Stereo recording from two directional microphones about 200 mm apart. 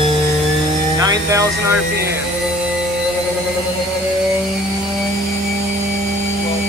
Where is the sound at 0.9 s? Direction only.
15° right (ahead or behind).